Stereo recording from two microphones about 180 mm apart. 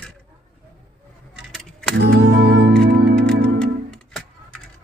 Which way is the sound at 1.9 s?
70° right (ahead or behind).